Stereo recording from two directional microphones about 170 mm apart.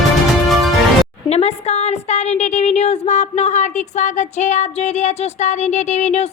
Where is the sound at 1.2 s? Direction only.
40° left (ahead or behind).